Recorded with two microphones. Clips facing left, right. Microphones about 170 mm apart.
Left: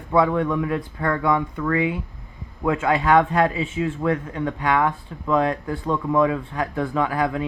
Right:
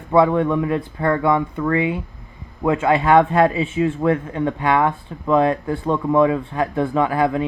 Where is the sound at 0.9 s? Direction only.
10° right (ahead or behind).